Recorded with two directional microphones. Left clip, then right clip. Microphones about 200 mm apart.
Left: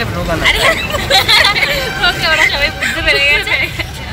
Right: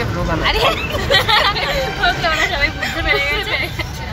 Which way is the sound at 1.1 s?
35° right (ahead or behind).